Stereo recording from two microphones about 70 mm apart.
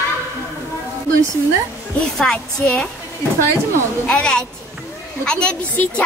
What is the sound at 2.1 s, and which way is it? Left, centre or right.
Speech, centre.